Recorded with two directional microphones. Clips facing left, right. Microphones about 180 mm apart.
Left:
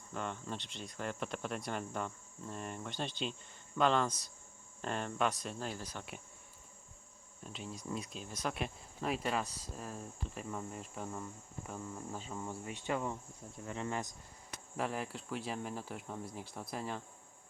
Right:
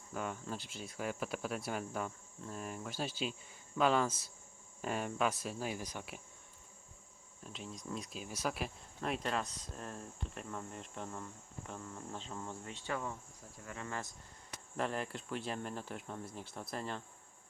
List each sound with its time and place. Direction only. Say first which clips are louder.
0.1 s speech: even; 5° right (ahead or behind)
7.4 s speech: left 2 dB; centre (ahead or behind); by 14.1 s 20° left (ahead or behind)
14.8 s speech: even; 5° left (ahead or behind)